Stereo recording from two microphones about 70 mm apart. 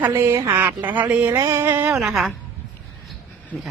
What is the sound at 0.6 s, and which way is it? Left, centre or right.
Speech, right.